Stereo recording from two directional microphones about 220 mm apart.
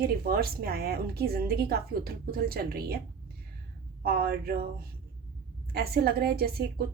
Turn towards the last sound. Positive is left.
turn(degrees=-45)  # may be behind; listen again after turning